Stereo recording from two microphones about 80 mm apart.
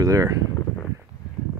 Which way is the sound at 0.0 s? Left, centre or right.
Right.